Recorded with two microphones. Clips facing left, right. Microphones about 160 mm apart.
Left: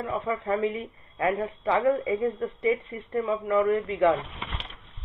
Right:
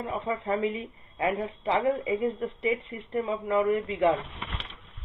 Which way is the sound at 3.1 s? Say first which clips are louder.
Left 2 dB; 25° right (ahead or behind).